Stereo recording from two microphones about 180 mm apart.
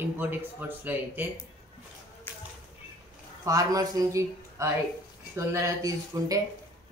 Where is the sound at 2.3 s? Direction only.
10° left (ahead or behind).